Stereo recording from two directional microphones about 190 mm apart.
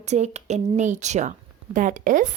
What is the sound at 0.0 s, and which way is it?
A woman's voice, 35° right (ahead or behind).